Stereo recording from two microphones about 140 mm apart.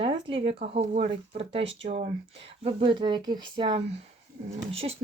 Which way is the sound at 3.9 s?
50° right (ahead or behind).